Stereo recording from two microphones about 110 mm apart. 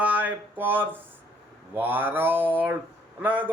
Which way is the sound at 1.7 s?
15° right (ahead or behind).